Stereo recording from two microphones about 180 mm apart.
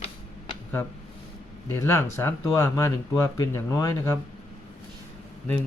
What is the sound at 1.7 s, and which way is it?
Speech, 15° left (ahead or behind).